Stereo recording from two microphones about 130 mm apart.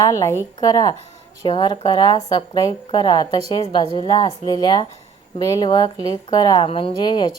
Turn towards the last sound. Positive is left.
turn(degrees=35)  # may be behind; listen again after turning